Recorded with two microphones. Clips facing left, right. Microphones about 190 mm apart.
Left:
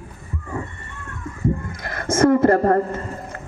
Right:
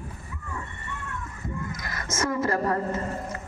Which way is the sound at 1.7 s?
55° left (ahead or behind).